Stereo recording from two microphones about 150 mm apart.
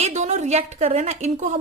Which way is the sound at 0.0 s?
50° right (ahead or behind).